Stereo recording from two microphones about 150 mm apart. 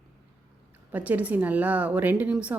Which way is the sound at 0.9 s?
10° right (ahead or behind).